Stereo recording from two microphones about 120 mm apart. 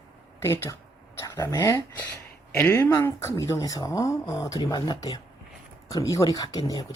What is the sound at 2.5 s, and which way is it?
Speech, 20° left (ahead or behind).